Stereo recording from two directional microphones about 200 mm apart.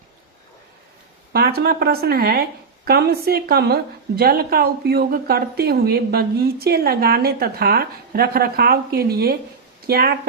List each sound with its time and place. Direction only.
1.3 s a woman's voice: 50° right (ahead or behind)